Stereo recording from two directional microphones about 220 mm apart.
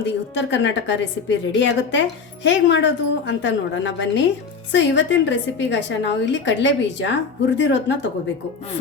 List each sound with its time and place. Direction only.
0.3 s a woman's voice: 55° left (ahead or behind)